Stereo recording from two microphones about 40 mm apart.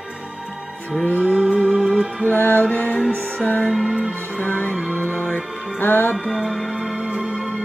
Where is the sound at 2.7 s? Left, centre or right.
Left.